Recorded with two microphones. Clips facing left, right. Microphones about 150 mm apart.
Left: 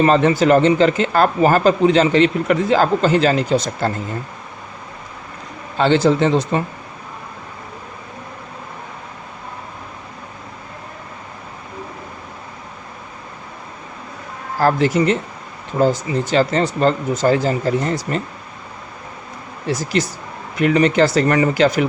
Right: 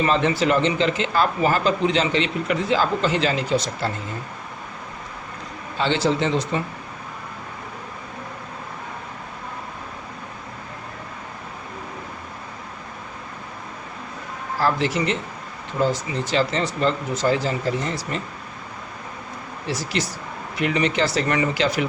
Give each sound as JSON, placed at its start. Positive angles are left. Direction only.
{"t": 0.0, "sound": "speech", "side_deg": 45}
{"t": 5.7, "sound": "speech", "side_deg": 45}
{"t": 14.6, "sound": "speech", "side_deg": 45}
{"t": 19.6, "sound": "speech", "side_deg": 45}